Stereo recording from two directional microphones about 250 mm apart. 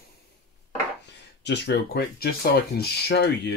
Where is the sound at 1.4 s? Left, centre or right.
Left.